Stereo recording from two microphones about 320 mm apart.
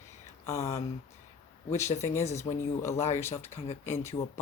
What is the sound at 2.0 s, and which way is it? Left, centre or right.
Speech, centre.